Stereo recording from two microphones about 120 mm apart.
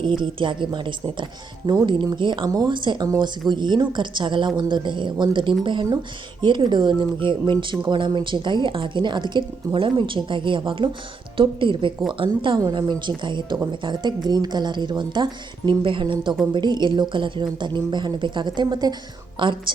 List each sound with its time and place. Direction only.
0.0 s a woman's voice: 40° right (ahead or behind)